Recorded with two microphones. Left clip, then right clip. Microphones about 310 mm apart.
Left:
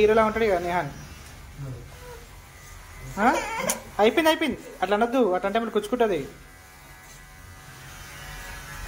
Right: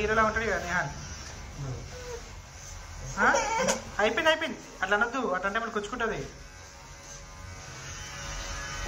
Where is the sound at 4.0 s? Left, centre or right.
Left.